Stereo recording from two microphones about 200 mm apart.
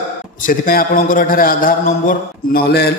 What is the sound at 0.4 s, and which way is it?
A man's voice, 45° left (ahead or behind).